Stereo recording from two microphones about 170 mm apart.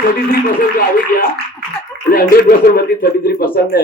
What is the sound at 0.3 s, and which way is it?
Speech, 60° left (ahead or behind).